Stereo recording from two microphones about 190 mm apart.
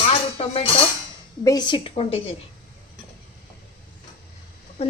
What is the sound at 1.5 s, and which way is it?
Dishes, 20° left (ahead or behind).